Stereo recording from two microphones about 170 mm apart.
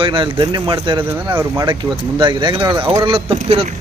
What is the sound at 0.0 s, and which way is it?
Speech, 30° right (ahead or behind).